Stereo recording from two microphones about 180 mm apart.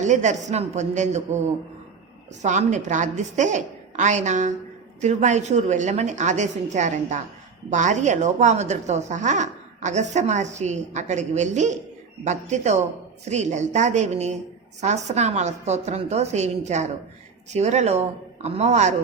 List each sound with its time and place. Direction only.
0.0 s a woman's voice: 40° right (ahead or behind)
2.4 s a woman's voice: 40° right (ahead or behind)